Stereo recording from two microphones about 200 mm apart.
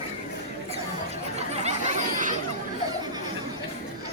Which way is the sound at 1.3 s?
35° right (ahead or behind).